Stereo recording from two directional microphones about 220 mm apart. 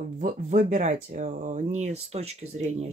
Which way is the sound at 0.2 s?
35° right (ahead or behind).